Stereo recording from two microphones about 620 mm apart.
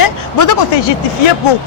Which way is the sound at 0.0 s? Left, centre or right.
Left.